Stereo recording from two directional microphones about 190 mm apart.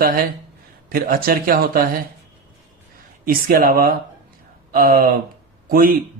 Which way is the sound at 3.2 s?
50° right (ahead or behind).